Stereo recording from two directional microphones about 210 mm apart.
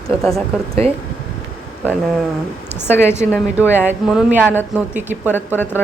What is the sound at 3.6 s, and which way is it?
A woman's voice, 10° right (ahead or behind).